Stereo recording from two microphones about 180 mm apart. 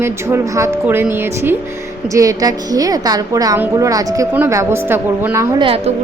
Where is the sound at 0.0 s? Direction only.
15° right (ahead or behind).